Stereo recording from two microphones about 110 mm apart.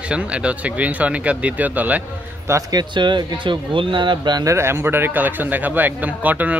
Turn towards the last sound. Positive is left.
turn(degrees=-15)  # may be behind; listen again after turning